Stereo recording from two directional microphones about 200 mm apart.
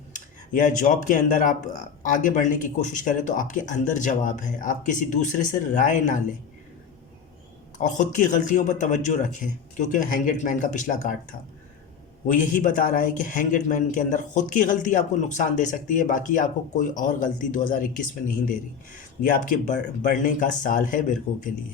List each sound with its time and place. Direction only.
0.5 s a man's voice: 40° left (ahead or behind)
7.8 s a man's voice: 40° left (ahead or behind)